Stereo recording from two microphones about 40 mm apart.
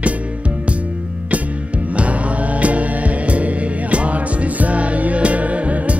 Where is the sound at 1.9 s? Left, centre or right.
Right.